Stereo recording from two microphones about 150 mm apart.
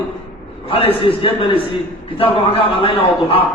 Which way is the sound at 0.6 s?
40° left (ahead or behind).